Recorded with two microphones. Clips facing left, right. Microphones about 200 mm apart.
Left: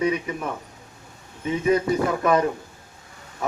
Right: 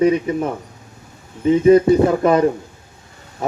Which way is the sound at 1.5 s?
30° right (ahead or behind).